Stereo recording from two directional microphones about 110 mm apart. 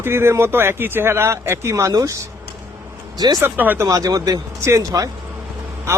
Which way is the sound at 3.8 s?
35° right (ahead or behind).